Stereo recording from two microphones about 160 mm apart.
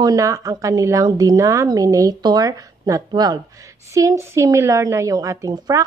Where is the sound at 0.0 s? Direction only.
20° right (ahead or behind).